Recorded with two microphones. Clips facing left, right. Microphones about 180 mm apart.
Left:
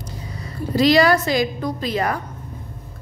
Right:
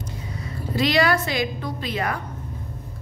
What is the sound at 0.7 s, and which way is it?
A woman's voice, 40° left (ahead or behind).